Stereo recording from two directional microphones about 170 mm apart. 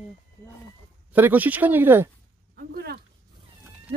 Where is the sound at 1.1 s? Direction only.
10° right (ahead or behind).